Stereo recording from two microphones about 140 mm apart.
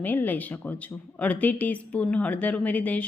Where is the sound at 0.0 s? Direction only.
10° left (ahead or behind).